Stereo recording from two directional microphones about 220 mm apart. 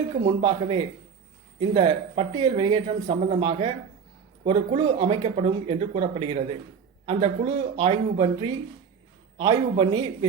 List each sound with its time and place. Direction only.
0.1 s speech: 25° right (ahead or behind)